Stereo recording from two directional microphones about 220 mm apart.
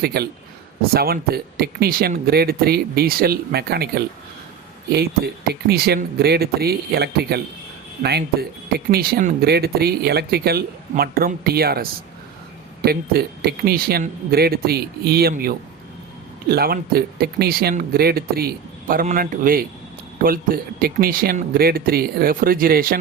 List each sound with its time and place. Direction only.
0.0 s speech: 45° right (ahead or behind)